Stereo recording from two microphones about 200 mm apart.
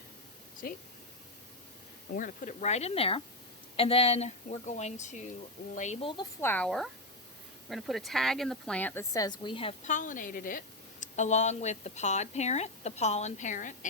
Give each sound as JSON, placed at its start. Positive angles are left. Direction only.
{"t": 0.6, "sound": "speech", "side_deg": 45}
{"t": 2.1, "sound": "a woman's voice", "side_deg": 40}
{"t": 6.4, "sound": "a woman's voice", "side_deg": 10}